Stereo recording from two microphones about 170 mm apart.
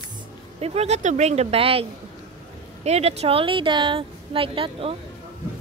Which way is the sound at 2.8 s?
40° right (ahead or behind).